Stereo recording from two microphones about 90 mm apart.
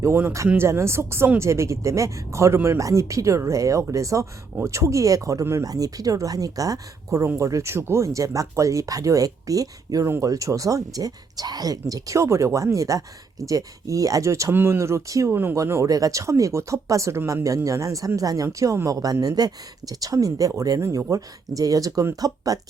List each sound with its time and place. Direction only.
0.4 s speech: 25° right (ahead or behind); by 22.6 s 40° right (ahead or behind)